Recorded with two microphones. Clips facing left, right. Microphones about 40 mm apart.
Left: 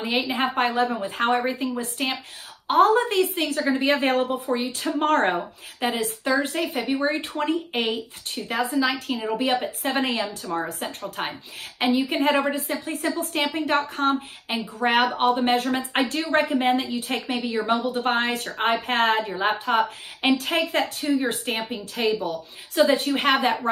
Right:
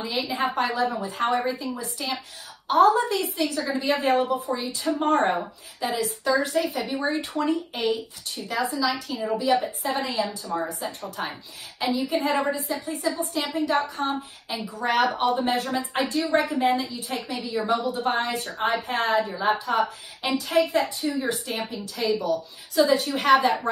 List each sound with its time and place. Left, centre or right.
0.0 s a woman's voice: left
5.0 s a woman's voice: left